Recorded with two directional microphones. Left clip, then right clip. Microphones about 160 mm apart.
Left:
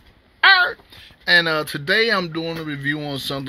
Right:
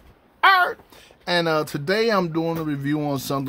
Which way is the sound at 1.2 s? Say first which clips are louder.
Left 5 dB; 15° right (ahead or behind).